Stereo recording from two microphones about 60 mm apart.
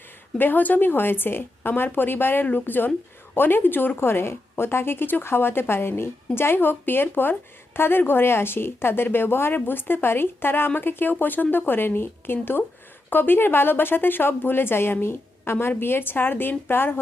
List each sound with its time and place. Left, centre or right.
0.3 s a woman's voice: left